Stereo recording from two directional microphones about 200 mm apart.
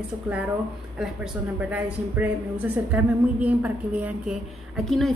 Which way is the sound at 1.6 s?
5° right (ahead or behind).